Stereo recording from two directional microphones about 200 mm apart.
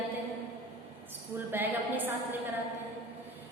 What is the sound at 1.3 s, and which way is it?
A woman's voice, 10° right (ahead or behind).